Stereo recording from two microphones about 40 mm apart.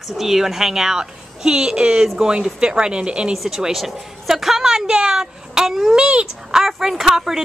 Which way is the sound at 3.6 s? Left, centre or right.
Centre.